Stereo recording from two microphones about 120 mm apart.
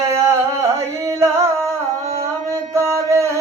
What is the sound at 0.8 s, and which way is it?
Carnatic music, 25° right (ahead or behind).